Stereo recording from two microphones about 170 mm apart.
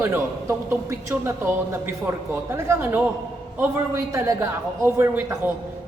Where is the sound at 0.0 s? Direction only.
15° right (ahead or behind).